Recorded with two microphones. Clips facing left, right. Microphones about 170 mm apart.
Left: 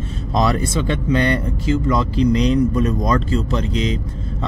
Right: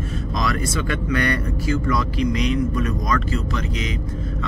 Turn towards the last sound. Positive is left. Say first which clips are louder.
# left 5 dB
turn(degrees=30)  # may be behind; listen again after turning